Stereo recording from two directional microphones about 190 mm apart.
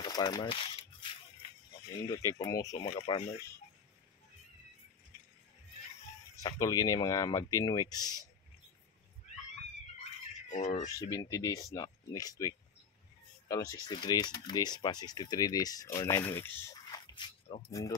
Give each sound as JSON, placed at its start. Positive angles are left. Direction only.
{"t": 0.0, "sound": "speech", "side_deg": 20}
{"t": 2.0, "sound": "speech", "side_deg": 20}
{"t": 3.1, "sound": "speech", "side_deg": 30}
{"t": 6.3, "sound": "speech", "side_deg": 20}
{"t": 10.5, "sound": "speech", "side_deg": 40}
{"t": 11.0, "sound": "speech", "side_deg": 15}